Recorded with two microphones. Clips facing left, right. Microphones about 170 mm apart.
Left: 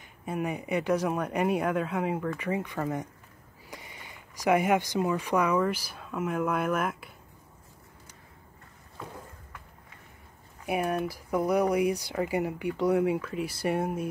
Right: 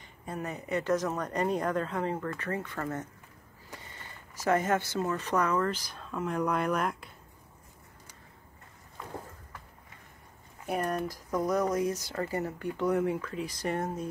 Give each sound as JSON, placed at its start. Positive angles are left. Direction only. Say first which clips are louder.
{"t": 0.2, "sound": "speech", "louder": "left 5 dB", "side_deg": 10}
{"t": 10.7, "sound": "speech", "louder": "left 2 dB", "side_deg": 10}